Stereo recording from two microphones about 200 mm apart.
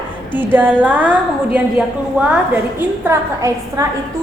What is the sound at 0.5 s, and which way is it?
Speech, 10° right (ahead or behind).